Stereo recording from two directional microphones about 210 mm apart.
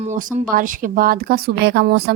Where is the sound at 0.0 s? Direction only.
35° right (ahead or behind).